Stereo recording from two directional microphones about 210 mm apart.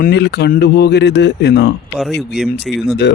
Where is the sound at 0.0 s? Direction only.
55° left (ahead or behind).